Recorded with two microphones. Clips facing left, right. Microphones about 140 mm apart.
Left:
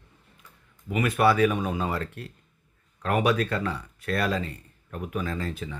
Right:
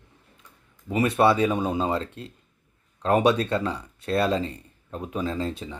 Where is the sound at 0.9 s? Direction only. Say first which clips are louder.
Right 2 dB; 30° right (ahead or behind).